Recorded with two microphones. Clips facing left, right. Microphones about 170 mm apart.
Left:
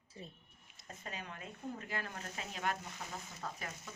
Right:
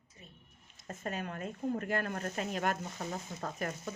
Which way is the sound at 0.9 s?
50° right (ahead or behind).